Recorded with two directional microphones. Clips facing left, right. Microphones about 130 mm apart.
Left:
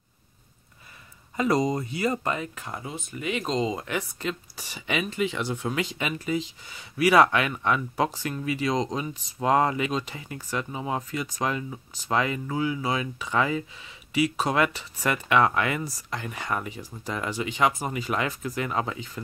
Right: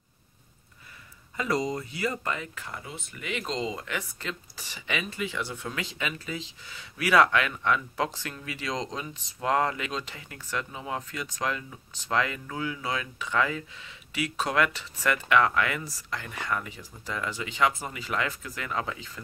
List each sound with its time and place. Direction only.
1.3 s speech: 30° left (ahead or behind)